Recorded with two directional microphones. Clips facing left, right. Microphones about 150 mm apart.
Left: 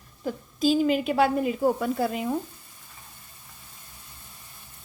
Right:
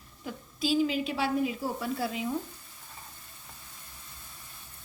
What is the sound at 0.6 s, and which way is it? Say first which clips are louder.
Speech: left 5 dB; 50° left (ahead or behind).